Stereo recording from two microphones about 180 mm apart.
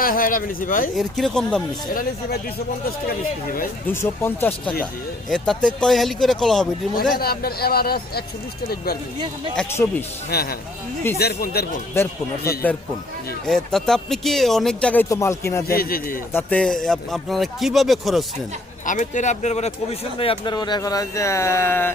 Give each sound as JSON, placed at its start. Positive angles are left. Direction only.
{"t": 0.0, "sound": "speech", "side_deg": 50}
{"t": 0.9, "sound": "speech", "side_deg": 0}
{"t": 1.9, "sound": "speech", "side_deg": 55}
{"t": 3.8, "sound": "speech", "side_deg": 15}
{"t": 7.2, "sound": "speech", "side_deg": 60}
{"t": 9.6, "sound": "speech", "side_deg": 15}
{"t": 10.2, "sound": "speech", "side_deg": 60}
{"t": 12.0, "sound": "speech", "side_deg": 15}
{"t": 13.4, "sound": "speech", "side_deg": 5}
{"t": 15.1, "sound": "speech", "side_deg": 15}
{"t": 15.6, "sound": "speech", "side_deg": 55}
{"t": 16.3, "sound": "speech", "side_deg": 10}
{"t": 18.9, "sound": "speech", "side_deg": 45}